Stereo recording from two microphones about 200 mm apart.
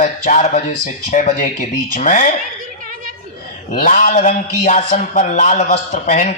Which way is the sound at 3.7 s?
40° left (ahead or behind).